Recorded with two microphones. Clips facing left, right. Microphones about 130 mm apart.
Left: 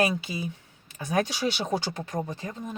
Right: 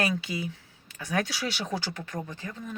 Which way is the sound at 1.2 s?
20° left (ahead or behind).